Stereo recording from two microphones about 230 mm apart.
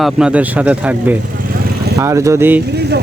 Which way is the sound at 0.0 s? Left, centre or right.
Centre.